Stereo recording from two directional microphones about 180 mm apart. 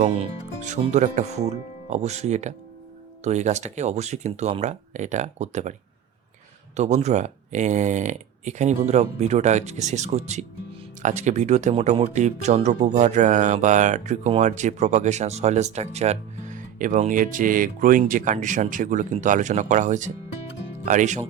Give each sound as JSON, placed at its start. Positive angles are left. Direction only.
{"t": 0.6, "sound": "speech", "side_deg": -40}
{"t": 6.7, "sound": "speech", "side_deg": -40}